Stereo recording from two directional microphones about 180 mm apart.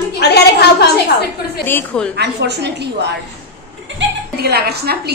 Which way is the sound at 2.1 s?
65° right (ahead or behind).